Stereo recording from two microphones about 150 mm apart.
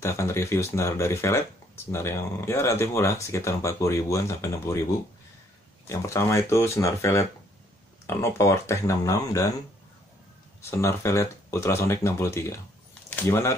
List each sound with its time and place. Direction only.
0.0 s speech: 20° left (ahead or behind)
5.9 s speech: 20° left (ahead or behind)
10.6 s speech: 20° left (ahead or behind)